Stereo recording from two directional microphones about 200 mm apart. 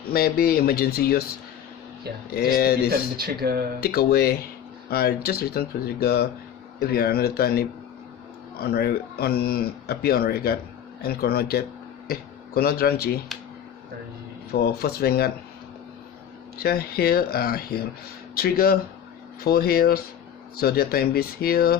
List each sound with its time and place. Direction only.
0.1 s speech: 50° left (ahead or behind)
2.3 s speech: 50° left (ahead or behind)
2.9 s speech: 50° right (ahead or behind)
3.8 s speech: 50° left (ahead or behind)
14.5 s speech: 50° left (ahead or behind)
16.6 s speech: 50° left (ahead or behind)